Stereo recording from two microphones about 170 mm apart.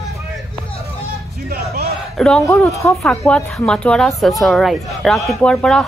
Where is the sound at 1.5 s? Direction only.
65° right (ahead or behind).